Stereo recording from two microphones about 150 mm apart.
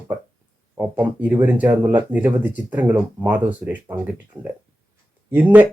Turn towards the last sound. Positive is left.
turn(degrees=-10)  # may be behind; listen again after turning